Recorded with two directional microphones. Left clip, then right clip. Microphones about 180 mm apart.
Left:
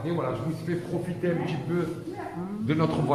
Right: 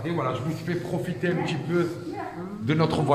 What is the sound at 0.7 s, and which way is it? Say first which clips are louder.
Speech: right 1 dB; 50° right (ahead or behind).